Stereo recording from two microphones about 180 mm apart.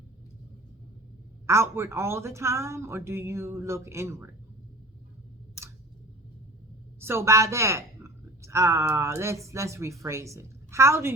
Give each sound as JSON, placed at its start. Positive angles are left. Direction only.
{"t": 1.5, "sound": "a woman's voice", "side_deg": -15}
{"t": 7.0, "sound": "a woman's voice", "side_deg": -15}